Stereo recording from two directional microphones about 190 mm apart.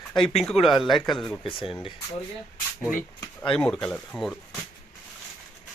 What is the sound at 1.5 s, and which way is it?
Speech, 30° left (ahead or behind).